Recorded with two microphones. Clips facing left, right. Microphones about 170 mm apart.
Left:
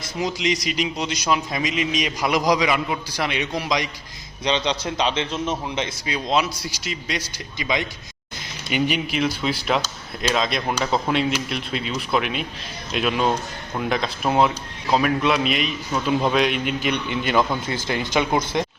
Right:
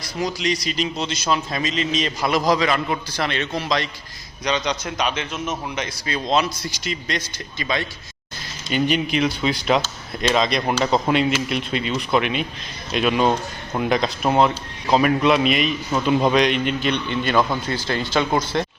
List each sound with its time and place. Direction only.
0.0 s a man's voice: 20° left (ahead or behind)
4.4 s a man's voice: 30° left (ahead or behind)
6.1 s a man's voice: 10° left (ahead or behind)
9.0 s a man's voice: centre (ahead or behind)